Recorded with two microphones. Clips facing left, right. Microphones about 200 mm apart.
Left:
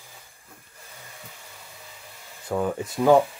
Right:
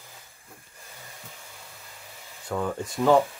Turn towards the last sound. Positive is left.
turn(degrees=10)  # may be behind; listen again after turning